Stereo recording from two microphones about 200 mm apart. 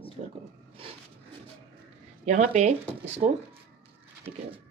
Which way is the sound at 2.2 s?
35° right (ahead or behind).